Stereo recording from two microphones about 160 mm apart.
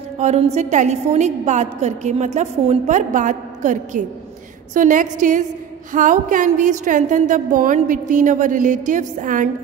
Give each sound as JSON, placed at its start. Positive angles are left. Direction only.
{"t": 0.2, "sound": "a woman's voice", "side_deg": -45}